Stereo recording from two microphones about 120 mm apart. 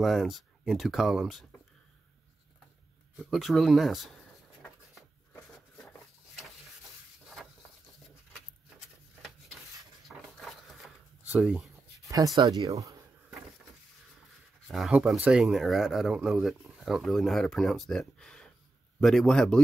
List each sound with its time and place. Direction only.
0.0 s speech: centre (ahead or behind)
3.3 s speech: centre (ahead or behind)
10.0 s a sound: centre (ahead or behind)
11.2 s speech: 15° right (ahead or behind)
12.0 s a sound: 30° right (ahead or behind)
12.4 s speech: 30° right (ahead or behind)
14.7 s speech: 5° right (ahead or behind)